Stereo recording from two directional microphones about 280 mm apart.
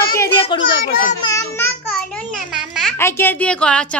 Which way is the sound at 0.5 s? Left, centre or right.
Centre.